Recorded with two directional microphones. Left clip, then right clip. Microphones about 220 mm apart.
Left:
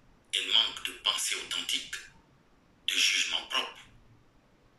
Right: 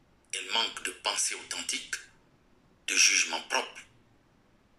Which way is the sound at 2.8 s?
25° right (ahead or behind).